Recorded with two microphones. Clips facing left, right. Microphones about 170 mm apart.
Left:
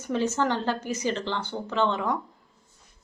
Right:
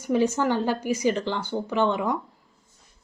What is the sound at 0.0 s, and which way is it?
Speech, 10° right (ahead or behind).